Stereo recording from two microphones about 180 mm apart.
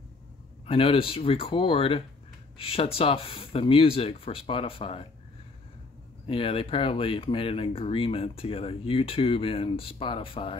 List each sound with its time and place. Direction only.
0.7 s speech: 30° left (ahead or behind)
6.2 s speech: 30° left (ahead or behind)